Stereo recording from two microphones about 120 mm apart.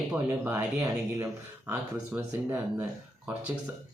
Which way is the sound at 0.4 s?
20° right (ahead or behind).